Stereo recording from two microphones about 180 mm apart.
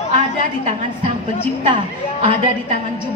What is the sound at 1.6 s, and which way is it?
Speech, 30° right (ahead or behind).